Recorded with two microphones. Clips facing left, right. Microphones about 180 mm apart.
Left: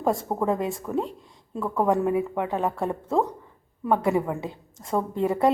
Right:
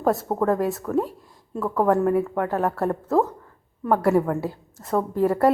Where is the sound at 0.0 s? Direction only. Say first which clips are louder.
Right 3 dB; 5° right (ahead or behind).